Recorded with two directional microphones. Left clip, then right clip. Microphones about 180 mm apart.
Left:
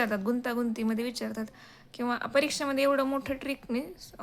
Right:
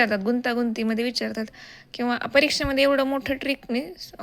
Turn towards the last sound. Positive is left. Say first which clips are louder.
# right 6 dB
turn(degrees=-20)  # may be behind; listen again after turning